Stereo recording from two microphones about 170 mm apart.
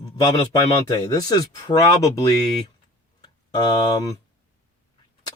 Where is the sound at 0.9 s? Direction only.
20° left (ahead or behind).